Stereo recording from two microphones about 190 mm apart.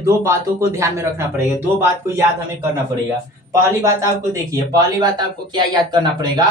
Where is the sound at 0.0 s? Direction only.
15° right (ahead or behind).